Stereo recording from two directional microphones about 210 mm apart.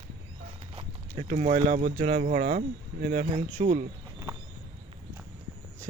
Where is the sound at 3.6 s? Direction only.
35° right (ahead or behind).